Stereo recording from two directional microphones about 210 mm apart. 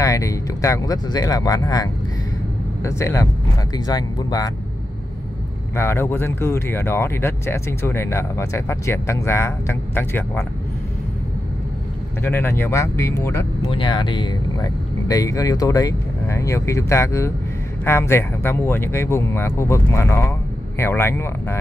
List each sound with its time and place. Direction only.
0.0 s speech: 15° left (ahead or behind)
5.8 s speech: 10° left (ahead or behind)
12.2 s speech: 10° left (ahead or behind)
13.7 s speech: 25° left (ahead or behind)